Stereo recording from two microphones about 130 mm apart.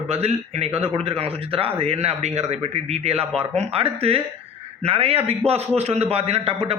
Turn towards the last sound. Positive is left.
turn(degrees=-50)  # may be behind; listen again after turning